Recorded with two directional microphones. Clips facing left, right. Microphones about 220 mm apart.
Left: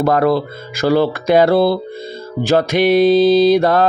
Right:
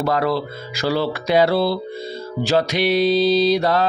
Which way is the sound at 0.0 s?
50° left (ahead or behind).